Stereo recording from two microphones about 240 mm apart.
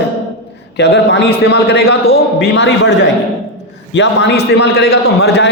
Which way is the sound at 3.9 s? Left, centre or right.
Left.